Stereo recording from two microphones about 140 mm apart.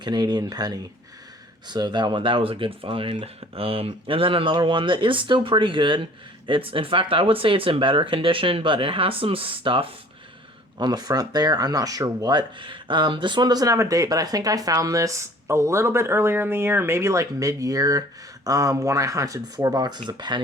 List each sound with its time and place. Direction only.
0.0 s speech: 30° right (ahead or behind)